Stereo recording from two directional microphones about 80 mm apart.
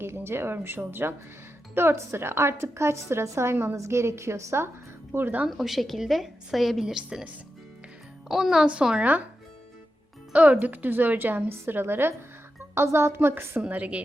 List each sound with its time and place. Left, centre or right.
0.0 s a woman's voice: right
5.1 s a woman's voice: right
5.5 s a woman's voice: centre
8.3 s speech: centre
10.3 s a woman's voice: centre